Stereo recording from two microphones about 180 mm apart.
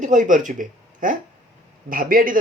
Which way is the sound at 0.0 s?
45° right (ahead or behind).